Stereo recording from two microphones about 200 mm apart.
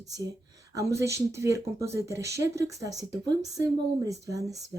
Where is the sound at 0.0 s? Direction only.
15° right (ahead or behind).